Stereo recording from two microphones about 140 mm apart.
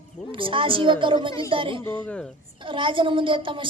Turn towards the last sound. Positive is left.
turn(degrees=-35)  # may be behind; listen again after turning